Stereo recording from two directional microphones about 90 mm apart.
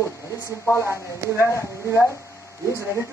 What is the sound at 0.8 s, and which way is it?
Speech, 30° right (ahead or behind).